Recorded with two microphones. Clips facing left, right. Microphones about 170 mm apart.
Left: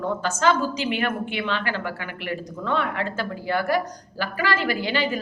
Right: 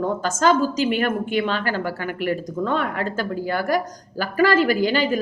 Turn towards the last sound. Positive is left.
turn(degrees=-45)  # may be behind; listen again after turning